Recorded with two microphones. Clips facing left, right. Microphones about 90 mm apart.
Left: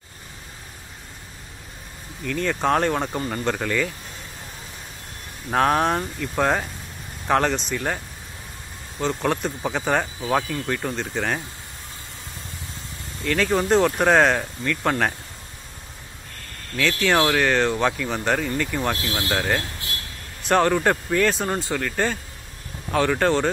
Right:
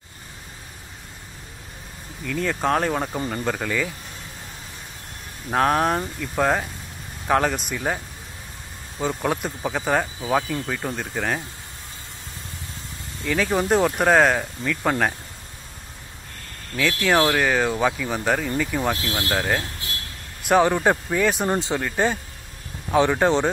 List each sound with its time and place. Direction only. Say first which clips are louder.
2.2 s speech: left 1 dB; centre (ahead or behind)
5.5 s speech: even; centre (ahead or behind)
9.0 s speech: left 1 dB; 10° right (ahead or behind)
13.2 s speech: left 1 dB; 5° right (ahead or behind)
16.7 s speech: even; 5° right (ahead or behind)